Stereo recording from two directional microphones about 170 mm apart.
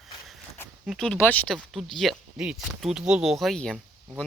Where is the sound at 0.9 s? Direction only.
5° left (ahead or behind).